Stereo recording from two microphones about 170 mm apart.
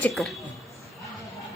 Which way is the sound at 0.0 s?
Centre (ahead or behind).